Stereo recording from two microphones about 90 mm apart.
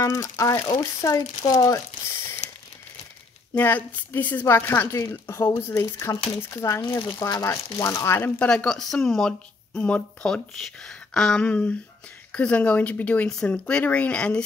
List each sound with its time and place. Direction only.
0.0 s speech: 35° left (ahead or behind)
3.5 s speech: 20° left (ahead or behind)
8.4 s speech: 10° left (ahead or behind)